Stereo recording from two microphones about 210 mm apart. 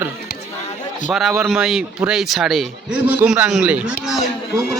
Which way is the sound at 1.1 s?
Centre (ahead or behind).